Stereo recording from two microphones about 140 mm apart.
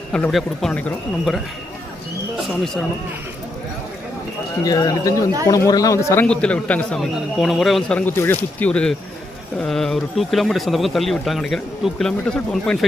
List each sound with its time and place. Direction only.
0.1 s speech: 5° left (ahead or behind)
4.6 s speech: 25° left (ahead or behind)
6.2 s speech: 5° left (ahead or behind)